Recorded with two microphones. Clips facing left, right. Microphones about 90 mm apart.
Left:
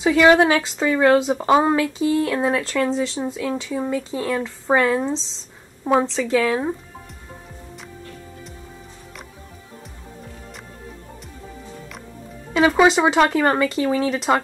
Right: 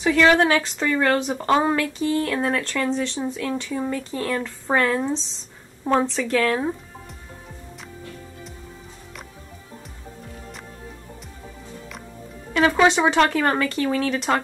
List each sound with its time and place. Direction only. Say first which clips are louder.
0.2 s speech: left 3 dB; 15° left (ahead or behind)
0.6 s a woman's voice: left 3 dB; 5° left (ahead or behind)
12.5 s speech: left 2 dB; 5° left (ahead or behind)